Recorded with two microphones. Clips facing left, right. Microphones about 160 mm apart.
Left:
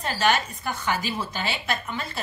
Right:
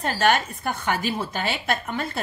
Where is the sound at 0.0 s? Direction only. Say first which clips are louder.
Right 2 dB; 50° right (ahead or behind).